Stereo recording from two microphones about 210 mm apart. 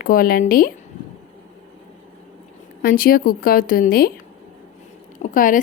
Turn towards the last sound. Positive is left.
turn(degrees=40)  # may be behind; listen again after turning